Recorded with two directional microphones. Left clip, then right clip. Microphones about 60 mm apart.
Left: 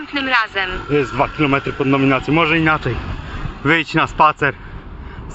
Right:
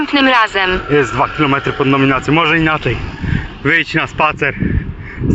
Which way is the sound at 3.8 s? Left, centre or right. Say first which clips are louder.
Left 1 dB; left.